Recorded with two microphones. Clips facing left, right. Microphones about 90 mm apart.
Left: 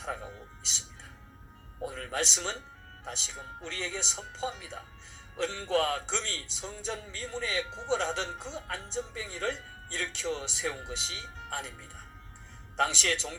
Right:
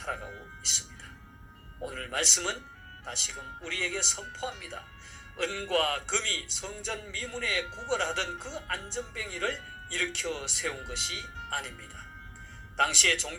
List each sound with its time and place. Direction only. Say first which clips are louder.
0.0 s speech: right 1 dB; 30° left (ahead or behind)
1.8 s speech: even; 30° left (ahead or behind)
12.7 s speech: right 1 dB; 25° left (ahead or behind)